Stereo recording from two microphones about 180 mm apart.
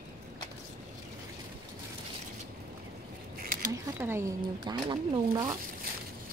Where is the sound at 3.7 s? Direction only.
15° right (ahead or behind).